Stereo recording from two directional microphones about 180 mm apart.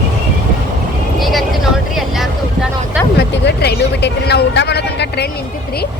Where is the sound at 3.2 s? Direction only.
65° left (ahead or behind).